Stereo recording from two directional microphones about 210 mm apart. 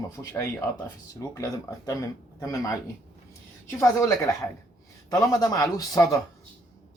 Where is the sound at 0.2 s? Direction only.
10° left (ahead or behind).